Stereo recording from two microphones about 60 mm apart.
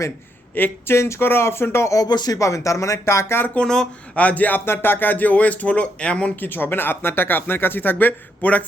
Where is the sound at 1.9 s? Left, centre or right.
Left.